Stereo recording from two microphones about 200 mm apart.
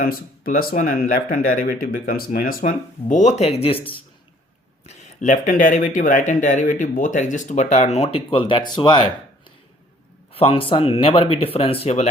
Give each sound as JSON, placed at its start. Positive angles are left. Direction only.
{"t": 0.0, "sound": "speech", "side_deg": 45}
{"t": 4.9, "sound": "speech", "side_deg": 40}
{"t": 10.3, "sound": "speech", "side_deg": 30}